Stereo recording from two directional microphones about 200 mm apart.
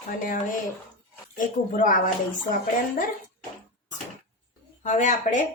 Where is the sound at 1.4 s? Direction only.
40° left (ahead or behind).